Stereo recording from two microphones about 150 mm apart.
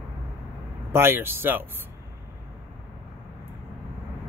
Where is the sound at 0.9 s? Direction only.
15° right (ahead or behind).